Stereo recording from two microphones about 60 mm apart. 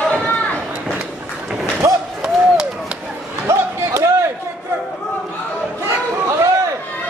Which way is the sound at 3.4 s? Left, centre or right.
Right.